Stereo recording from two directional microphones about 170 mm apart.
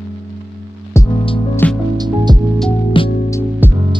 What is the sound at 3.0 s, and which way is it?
Music, 30° left (ahead or behind).